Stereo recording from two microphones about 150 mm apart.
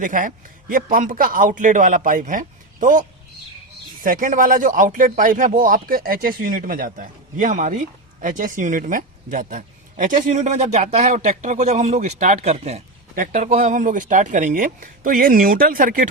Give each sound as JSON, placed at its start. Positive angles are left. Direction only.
{"t": 0.0, "sound": "speech", "side_deg": -60}